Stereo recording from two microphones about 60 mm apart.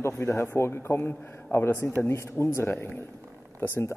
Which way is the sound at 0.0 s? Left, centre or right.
Left.